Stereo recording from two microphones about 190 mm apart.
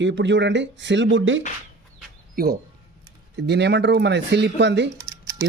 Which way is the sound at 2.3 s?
55° right (ahead or behind).